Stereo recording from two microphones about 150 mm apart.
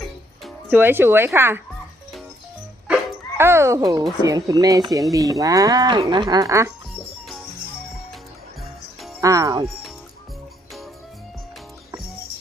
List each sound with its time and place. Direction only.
0.7 s speech: 15° right (ahead or behind)
2.8 s dog: 15° right (ahead or behind)
4.2 s speech: 25° right (ahead or behind)
9.2 s speech: 25° right (ahead or behind)